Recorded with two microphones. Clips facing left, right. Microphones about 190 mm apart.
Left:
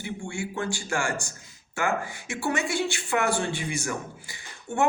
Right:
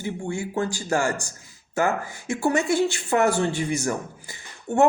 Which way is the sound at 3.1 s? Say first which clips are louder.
Right 5 dB; 40° right (ahead or behind).